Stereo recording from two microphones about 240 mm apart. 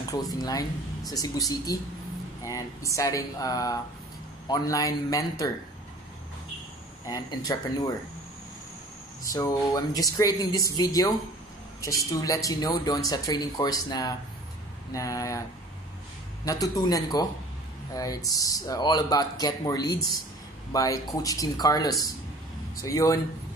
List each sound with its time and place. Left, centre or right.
0.1 s speech: centre
7.1 s speech: centre
9.3 s speech: centre
16.4 s speech: centre